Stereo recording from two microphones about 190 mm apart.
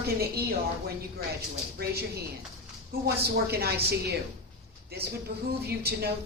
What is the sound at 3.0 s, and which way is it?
Speech, 55° right (ahead or behind).